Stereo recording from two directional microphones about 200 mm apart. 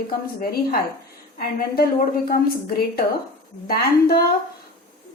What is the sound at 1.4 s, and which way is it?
A woman's voice, 45° left (ahead or behind).